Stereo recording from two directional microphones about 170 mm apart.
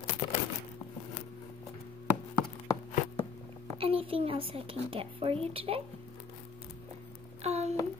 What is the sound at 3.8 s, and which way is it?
A woman's voice, 30° right (ahead or behind).